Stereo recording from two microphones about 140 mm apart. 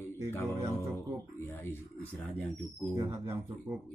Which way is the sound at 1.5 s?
15° left (ahead or behind).